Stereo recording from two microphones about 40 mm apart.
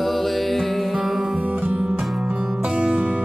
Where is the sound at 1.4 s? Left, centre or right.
Right.